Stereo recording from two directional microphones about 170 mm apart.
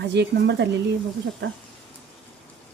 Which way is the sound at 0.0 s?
90° right.